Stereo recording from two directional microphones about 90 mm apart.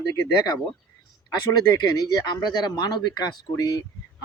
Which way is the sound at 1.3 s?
50° left (ahead or behind).